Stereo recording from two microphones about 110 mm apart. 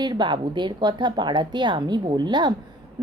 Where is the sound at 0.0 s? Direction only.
45° right (ahead or behind).